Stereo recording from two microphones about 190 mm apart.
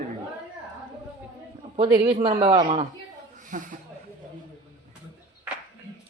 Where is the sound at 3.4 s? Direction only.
45° right (ahead or behind).